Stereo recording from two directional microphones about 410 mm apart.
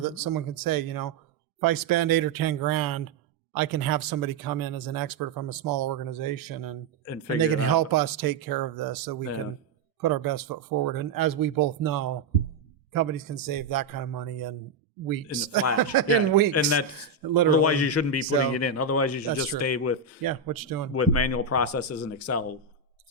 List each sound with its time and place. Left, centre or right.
0.0 s speech: right
16.5 s speech: left
20.2 s speech: right
20.9 s speech: left